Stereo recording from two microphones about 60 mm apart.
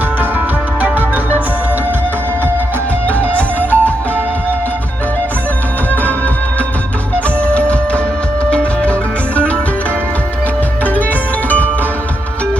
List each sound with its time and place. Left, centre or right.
0.2 s music: right
3.1 s music: left
7.3 s music: left